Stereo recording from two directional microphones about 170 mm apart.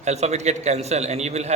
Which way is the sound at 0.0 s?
40° right (ahead or behind).